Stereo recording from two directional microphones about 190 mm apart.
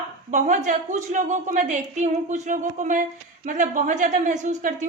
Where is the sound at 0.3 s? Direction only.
40° right (ahead or behind).